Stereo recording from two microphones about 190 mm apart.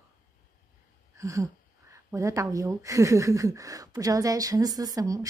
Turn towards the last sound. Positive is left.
turn(degrees=-20)  # may be behind; listen again after turning